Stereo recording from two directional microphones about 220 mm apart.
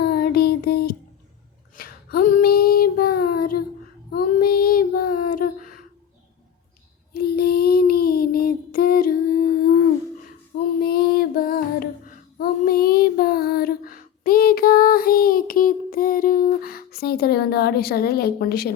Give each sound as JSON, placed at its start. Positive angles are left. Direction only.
{"t": 0.0, "sound": "music", "side_deg": 45}
{"t": 1.7, "sound": "female singing", "side_deg": 40}
{"t": 3.3, "sound": "a sound", "side_deg": 40}
{"t": 4.1, "sound": "child singing", "side_deg": 40}
{"t": 5.3, "sound": "a sound", "side_deg": 40}
{"t": 7.1, "sound": "child singing", "side_deg": 45}
{"t": 10.8, "sound": "female singing", "side_deg": 45}